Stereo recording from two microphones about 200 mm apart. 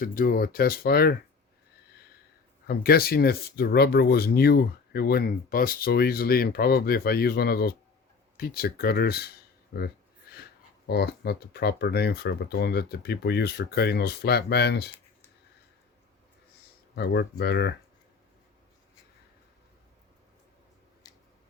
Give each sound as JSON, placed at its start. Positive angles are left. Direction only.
{"t": 0.0, "sound": "speech", "side_deg": 45}
{"t": 2.6, "sound": "speech", "side_deg": 50}
{"t": 16.9, "sound": "speech", "side_deg": 55}